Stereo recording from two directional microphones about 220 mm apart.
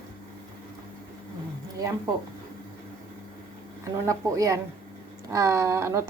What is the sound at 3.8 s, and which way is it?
Speech, 15° right (ahead or behind).